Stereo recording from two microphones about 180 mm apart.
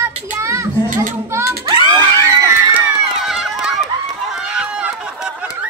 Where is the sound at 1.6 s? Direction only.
25° right (ahead or behind).